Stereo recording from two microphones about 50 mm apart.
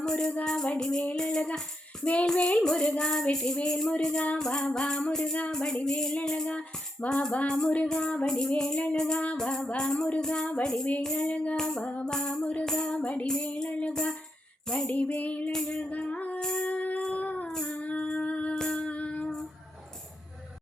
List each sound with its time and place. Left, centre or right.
0.0 s speech: centre
0.4 s music: centre
11.1 s music: left
11.5 s music: centre
11.8 s music: left
12.6 s music: centre
12.9 s music: left
17.0 s child singing: left
17.6 s music: left
18.7 s child singing: left